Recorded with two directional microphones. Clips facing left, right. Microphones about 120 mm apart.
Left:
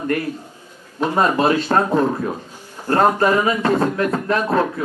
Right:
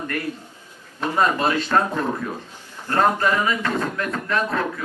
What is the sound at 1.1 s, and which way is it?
A man's voice, 35° left (ahead or behind).